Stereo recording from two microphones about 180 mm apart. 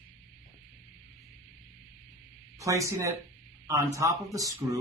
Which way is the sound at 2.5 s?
15° right (ahead or behind).